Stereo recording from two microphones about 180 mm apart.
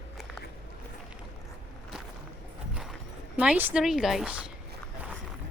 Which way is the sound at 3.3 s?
10° right (ahead or behind).